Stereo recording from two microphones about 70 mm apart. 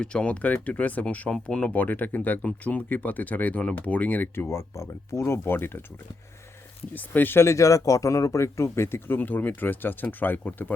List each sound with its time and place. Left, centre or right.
0.0 s speech: centre
4.4 s speech: left
6.9 s speech: left
7.4 s speech: left